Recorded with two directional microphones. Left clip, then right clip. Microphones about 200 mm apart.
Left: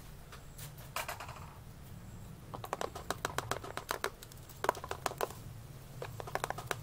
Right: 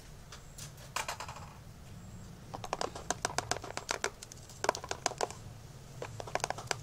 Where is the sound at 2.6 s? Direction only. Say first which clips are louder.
Right 2 dB; centre (ahead or behind).